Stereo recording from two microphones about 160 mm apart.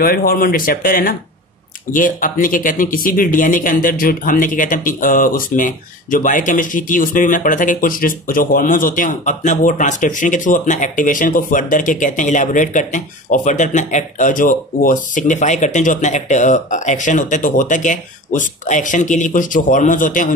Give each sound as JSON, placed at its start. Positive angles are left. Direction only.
{"t": 0.0, "sound": "speech", "side_deg": 70}